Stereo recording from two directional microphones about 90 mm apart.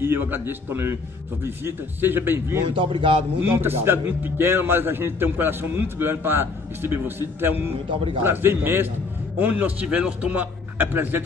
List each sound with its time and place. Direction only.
0.0 s a man's voice: 25° right (ahead or behind)
2.8 s a man's voice: 80° right
3.3 s a man's voice: 25° right (ahead or behind)